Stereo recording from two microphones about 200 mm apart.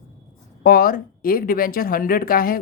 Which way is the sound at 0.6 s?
45° left (ahead or behind).